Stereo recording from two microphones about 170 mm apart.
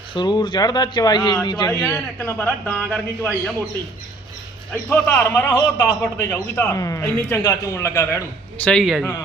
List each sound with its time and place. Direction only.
0.1 s speech: 25° left (ahead or behind)
2.1 s a man's voice: 10° left (ahead or behind)
4.7 s a man's voice: 10° left (ahead or behind)
8.6 s a man's voice: centre (ahead or behind)